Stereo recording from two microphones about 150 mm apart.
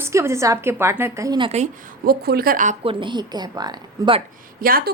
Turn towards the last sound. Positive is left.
turn(degrees=-75)  # may be behind; listen again after turning